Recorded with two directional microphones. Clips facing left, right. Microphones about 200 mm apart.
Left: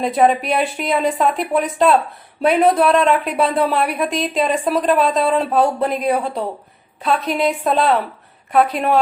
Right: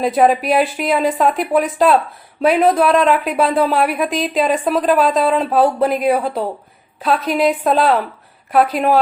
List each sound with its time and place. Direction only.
0.0 s speech: centre (ahead or behind)